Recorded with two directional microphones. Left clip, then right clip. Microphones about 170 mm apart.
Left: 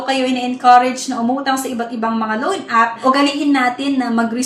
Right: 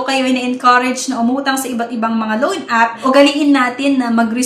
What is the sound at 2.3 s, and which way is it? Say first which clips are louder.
A woman's voice: right 2 dB; 25° right (ahead or behind).